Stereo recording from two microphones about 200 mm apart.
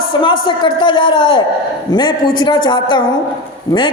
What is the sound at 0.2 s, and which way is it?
A man's voice, 25° left (ahead or behind).